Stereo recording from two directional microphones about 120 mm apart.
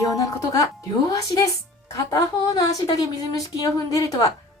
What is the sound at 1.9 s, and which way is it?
A woman's voice, 30° left (ahead or behind).